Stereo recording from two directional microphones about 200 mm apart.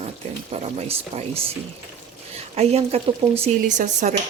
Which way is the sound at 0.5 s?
30° right (ahead or behind).